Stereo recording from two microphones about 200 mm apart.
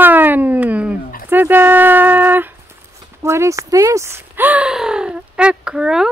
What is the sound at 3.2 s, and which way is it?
Speech, 15° right (ahead or behind).